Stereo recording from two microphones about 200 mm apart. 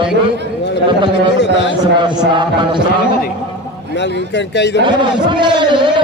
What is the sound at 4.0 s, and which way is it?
Speech, 60° left (ahead or behind).